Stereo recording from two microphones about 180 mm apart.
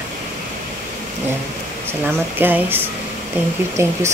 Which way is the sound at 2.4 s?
10° right (ahead or behind).